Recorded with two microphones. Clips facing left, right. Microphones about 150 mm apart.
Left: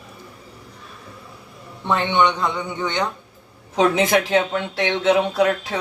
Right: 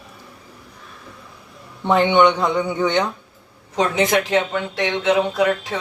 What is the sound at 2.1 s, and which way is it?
Speech, 10° right (ahead or behind).